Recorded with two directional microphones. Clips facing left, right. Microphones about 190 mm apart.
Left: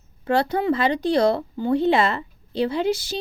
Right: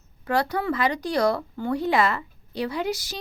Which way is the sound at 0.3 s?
25° left (ahead or behind).